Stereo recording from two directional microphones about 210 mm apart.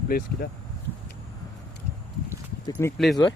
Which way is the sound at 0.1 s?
45° left (ahead or behind).